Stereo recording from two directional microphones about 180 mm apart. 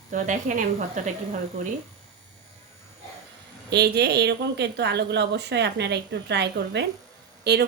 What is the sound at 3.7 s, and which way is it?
A woman's voice, 65° right (ahead or behind).